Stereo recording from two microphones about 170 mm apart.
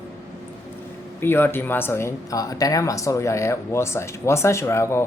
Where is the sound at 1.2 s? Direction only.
15° left (ahead or behind).